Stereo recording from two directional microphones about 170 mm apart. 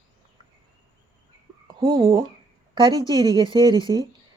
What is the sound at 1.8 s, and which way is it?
Speech, 30° right (ahead or behind).